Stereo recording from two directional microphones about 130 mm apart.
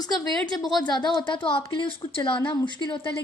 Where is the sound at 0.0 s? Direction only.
30° left (ahead or behind).